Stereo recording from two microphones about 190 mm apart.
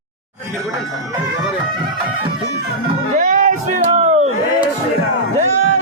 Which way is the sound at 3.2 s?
40° right (ahead or behind).